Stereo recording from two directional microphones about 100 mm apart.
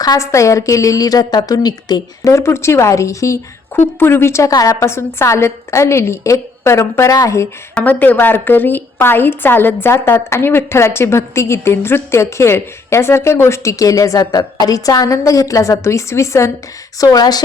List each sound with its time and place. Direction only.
0.0 s a woman's voice: 35° left (ahead or behind)
2.3 s a woman's voice: 25° left (ahead or behind)
7.8 s a woman's voice: 15° left (ahead or behind)
17.0 s a woman's voice: 40° left (ahead or behind)